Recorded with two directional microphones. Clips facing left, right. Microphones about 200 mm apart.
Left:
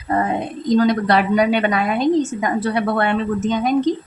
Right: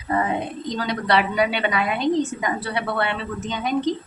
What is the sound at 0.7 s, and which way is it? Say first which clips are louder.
Speech: left 8 dB; 45° left (ahead or behind).